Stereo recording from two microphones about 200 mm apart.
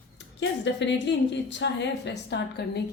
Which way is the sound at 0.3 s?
65° left (ahead or behind).